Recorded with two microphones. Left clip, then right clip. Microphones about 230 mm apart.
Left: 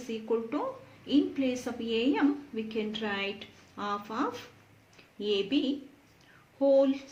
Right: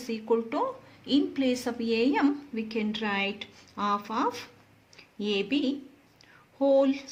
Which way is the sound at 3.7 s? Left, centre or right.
Right.